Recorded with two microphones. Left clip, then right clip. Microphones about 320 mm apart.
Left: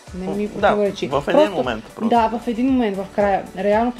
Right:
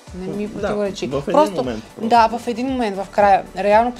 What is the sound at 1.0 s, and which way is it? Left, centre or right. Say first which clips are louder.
Speech: right 1 dB; right.